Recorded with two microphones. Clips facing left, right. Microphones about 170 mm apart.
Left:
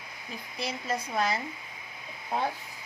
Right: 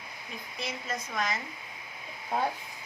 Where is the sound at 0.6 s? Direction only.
30° left (ahead or behind).